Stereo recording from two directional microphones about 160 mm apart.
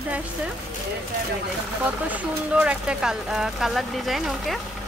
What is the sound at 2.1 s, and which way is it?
Speech, 10° right (ahead or behind).